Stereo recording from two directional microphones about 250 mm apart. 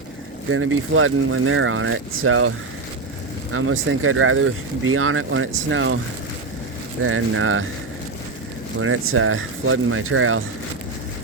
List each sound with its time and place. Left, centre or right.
0.5 s speech: right
3.5 s speech: right
7.0 s speech: right
8.8 s speech: right